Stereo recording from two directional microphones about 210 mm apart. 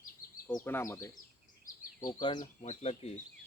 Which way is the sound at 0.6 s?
10° left (ahead or behind).